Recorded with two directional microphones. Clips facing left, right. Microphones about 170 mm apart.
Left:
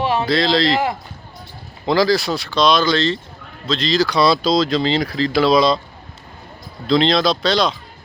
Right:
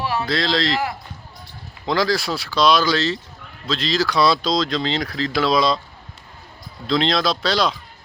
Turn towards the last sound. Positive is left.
turn(degrees=-5)  # may be behind; listen again after turning